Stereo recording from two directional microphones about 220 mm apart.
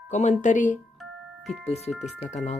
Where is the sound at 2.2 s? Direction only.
30° left (ahead or behind).